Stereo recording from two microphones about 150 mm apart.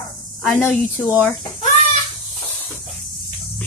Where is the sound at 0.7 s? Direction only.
5° left (ahead or behind).